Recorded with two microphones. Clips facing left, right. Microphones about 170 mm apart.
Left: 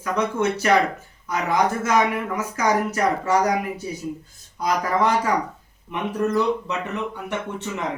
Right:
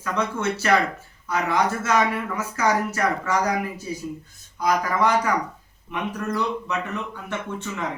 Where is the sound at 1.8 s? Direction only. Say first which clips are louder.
Left 1 dB; 15° left (ahead or behind).